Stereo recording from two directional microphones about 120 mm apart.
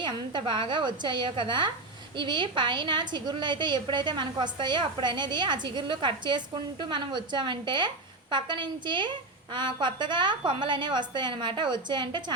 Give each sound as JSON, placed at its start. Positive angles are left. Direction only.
{"t": 0.0, "sound": "a woman's voice", "side_deg": -40}